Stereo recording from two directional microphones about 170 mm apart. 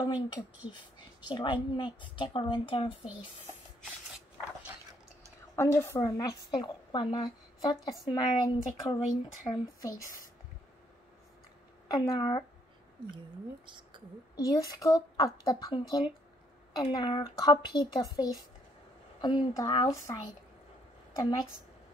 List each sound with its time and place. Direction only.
0.0 s a woman's voice: 25° left (ahead or behind)
5.6 s a woman's voice: 15° left (ahead or behind)
7.7 s speech: centre (ahead or behind)
8.1 s a woman's voice: 25° left (ahead or behind)
11.9 s a woman's voice: 25° left (ahead or behind)
13.7 s speech: 30° right (ahead or behind)
14.3 s a woman's voice: 20° left (ahead or behind)